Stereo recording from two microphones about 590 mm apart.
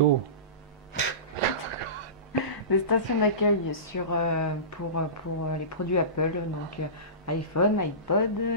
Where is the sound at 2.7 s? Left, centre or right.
Left.